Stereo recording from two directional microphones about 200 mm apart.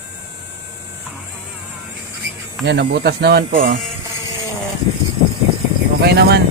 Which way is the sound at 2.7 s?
55° right (ahead or behind).